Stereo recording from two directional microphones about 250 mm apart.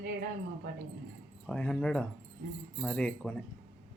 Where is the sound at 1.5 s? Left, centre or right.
Centre.